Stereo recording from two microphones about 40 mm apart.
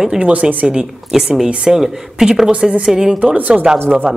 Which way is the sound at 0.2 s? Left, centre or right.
Right.